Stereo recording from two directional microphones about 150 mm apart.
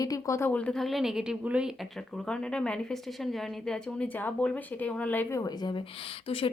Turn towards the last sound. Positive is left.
turn(degrees=40)  # may be behind; listen again after turning